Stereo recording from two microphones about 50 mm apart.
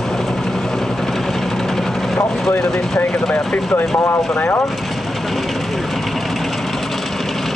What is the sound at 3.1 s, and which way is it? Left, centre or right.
Speech, centre.